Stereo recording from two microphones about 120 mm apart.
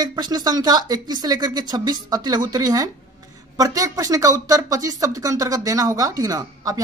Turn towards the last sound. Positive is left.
turn(degrees=-30)  # may be behind; listen again after turning